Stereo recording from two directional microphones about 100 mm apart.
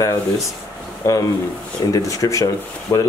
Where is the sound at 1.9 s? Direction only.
35° left (ahead or behind).